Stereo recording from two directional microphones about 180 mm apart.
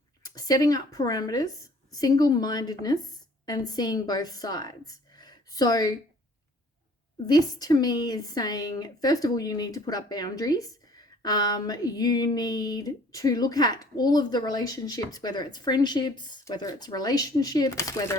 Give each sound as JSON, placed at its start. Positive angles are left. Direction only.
{"t": 0.2, "sound": "a woman's voice", "side_deg": 20}
{"t": 7.3, "sound": "speech", "side_deg": 20}